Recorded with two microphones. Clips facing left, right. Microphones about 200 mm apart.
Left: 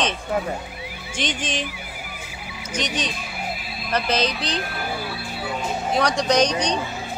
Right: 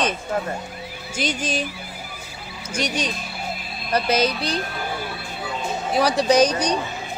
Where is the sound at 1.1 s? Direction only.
10° right (ahead or behind).